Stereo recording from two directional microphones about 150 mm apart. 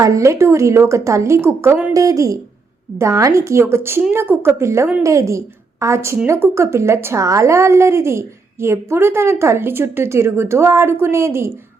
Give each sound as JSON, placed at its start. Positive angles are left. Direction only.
{"t": 0.0, "sound": "a woman's voice", "side_deg": -20}